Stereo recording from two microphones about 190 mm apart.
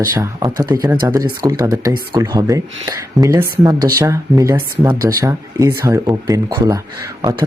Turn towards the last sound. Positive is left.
turn(degrees=-20)  # may be behind; listen again after turning